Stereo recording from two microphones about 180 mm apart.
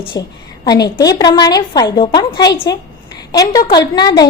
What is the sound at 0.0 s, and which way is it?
A woman's voice, 25° left (ahead or behind).